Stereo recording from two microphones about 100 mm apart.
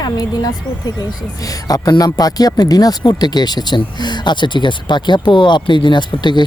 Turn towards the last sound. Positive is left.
turn(degrees=50)  # may be behind; listen again after turning